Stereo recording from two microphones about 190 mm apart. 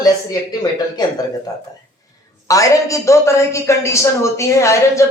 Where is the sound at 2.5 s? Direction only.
15° left (ahead or behind).